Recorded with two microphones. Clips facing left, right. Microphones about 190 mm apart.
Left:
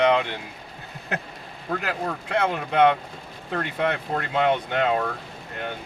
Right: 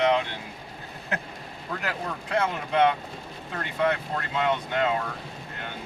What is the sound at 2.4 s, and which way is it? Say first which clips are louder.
Speech: left 3 dB; 60° left (ahead or behind).